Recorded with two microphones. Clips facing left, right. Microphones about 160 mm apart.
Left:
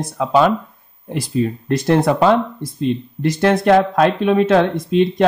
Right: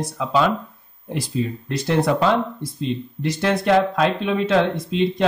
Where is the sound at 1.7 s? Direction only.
50° left (ahead or behind).